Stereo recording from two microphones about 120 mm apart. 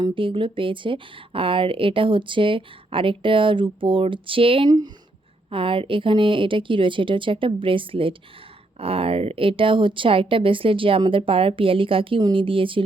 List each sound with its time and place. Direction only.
0.0 s speech: 45° right (ahead or behind)